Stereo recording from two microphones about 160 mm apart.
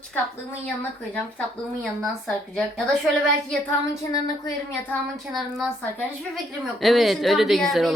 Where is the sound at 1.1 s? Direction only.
5° left (ahead or behind).